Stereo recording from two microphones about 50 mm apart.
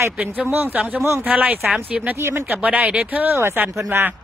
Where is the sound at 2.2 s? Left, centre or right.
Right.